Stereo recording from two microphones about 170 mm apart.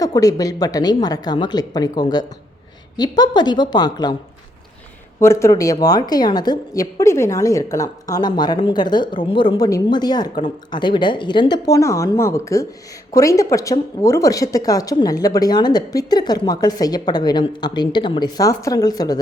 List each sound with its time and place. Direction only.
0.0 s a woman's voice: 20° left (ahead or behind)
5.2 s a woman's voice: 15° left (ahead or behind)